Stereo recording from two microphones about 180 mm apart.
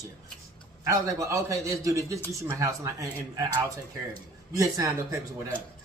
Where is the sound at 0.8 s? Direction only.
15° right (ahead or behind).